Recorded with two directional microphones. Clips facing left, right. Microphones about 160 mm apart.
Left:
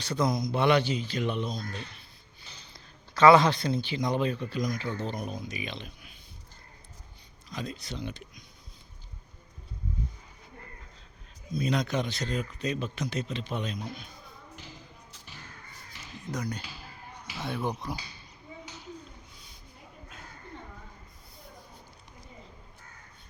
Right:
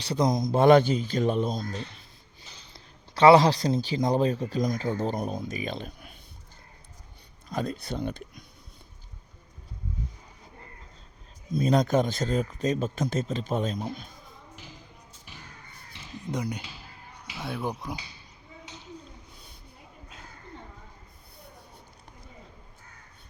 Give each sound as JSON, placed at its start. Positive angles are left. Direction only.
{"t": 0.3, "sound": "speech", "side_deg": -45}
{"t": 2.7, "sound": "speech", "side_deg": -30}
{"t": 7.5, "sound": "speech", "side_deg": -50}
{"t": 11.5, "sound": "speech", "side_deg": -45}
{"t": 15.9, "sound": "a sound", "side_deg": -25}
{"t": 17.3, "sound": "speech", "side_deg": -5}